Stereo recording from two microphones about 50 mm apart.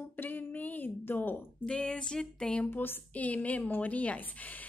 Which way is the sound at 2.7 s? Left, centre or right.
Left.